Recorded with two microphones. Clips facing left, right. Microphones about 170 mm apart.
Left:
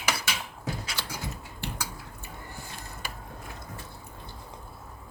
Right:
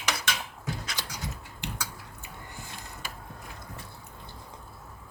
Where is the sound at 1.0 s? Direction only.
15° right (ahead or behind).